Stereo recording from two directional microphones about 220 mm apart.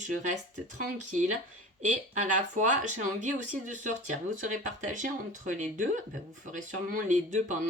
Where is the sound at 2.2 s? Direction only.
35° right (ahead or behind).